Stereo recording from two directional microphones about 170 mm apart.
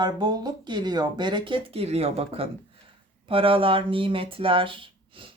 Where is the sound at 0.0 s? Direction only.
25° right (ahead or behind).